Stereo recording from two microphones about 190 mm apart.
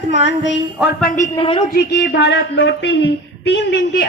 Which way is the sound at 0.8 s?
45° left (ahead or behind).